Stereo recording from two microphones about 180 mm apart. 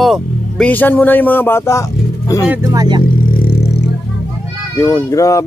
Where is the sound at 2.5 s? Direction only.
20° right (ahead or behind).